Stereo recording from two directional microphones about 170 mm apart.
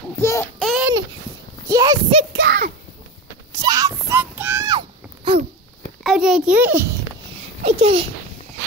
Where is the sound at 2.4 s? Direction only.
80° right.